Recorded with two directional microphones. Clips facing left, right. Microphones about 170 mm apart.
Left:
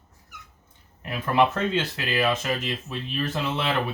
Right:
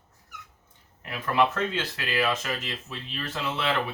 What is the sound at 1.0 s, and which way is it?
Speech, 25° left (ahead or behind).